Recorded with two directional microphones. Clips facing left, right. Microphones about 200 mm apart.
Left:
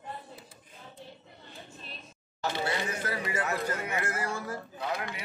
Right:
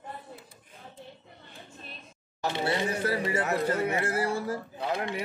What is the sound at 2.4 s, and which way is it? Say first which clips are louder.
Speech: right 3 dB; 25° right (ahead or behind).